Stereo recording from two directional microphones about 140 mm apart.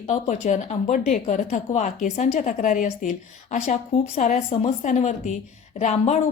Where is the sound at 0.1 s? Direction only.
55° left (ahead or behind).